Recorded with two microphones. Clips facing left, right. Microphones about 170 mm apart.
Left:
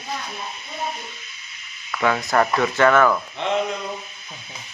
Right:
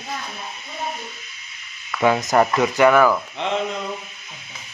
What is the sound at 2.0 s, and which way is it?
Speech, 20° right (ahead or behind).